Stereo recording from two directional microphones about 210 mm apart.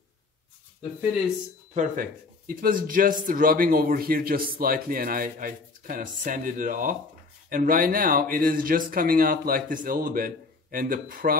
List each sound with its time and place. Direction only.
1.7 s speech: 40° right (ahead or behind)